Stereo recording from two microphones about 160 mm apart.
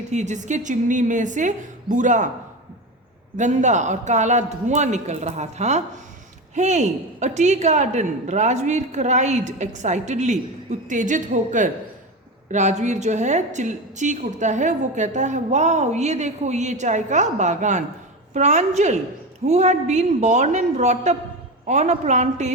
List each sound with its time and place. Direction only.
0.1 s a woman's voice: 45° right (ahead or behind)
3.3 s a woman's voice: 50° right (ahead or behind)